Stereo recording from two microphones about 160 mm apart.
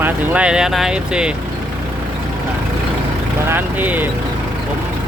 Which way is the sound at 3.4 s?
10° right (ahead or behind).